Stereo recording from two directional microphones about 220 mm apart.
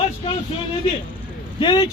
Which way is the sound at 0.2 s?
25° left (ahead or behind).